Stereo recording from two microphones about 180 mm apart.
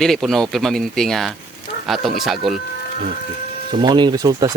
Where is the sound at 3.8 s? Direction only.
25° right (ahead or behind).